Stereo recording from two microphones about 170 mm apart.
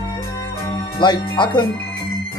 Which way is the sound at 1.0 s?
25° left (ahead or behind).